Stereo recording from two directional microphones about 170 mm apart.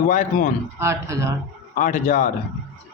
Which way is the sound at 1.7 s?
45° left (ahead or behind).